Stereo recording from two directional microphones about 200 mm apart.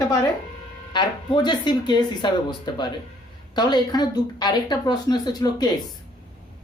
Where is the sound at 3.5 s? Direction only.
20° left (ahead or behind).